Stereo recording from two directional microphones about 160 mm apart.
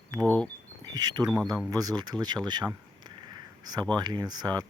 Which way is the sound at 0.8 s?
25° right (ahead or behind).